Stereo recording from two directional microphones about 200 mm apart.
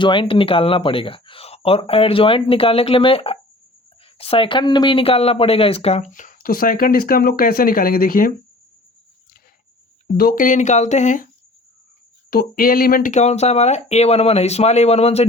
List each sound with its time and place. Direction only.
0.0 s speech: 25° left (ahead or behind); by 8.3 s 45° left (ahead or behind)
10.2 s speech: 45° left (ahead or behind)
12.3 s speech: 45° left (ahead or behind); by 15.3 s 30° left (ahead or behind)